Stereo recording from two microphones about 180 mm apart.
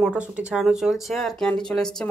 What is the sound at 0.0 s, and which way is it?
Speech, 5° right (ahead or behind).